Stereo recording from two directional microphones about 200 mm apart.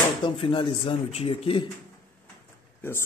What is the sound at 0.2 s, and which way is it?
Speech, 25° left (ahead or behind).